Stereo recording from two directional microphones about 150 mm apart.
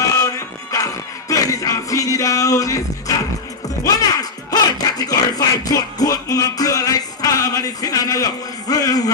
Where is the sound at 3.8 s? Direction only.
25° left (ahead or behind).